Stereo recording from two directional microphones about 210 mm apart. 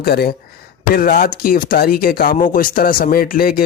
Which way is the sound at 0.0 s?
50° left (ahead or behind).